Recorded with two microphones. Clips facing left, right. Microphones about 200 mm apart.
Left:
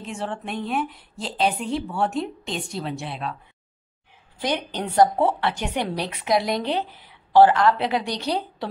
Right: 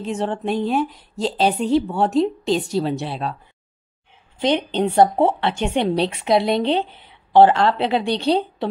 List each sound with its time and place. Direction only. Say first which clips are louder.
0.0 s a woman's voice: right 7 dB; 35° right (ahead or behind)
4.4 s a woman's voice: right 7 dB; 25° right (ahead or behind)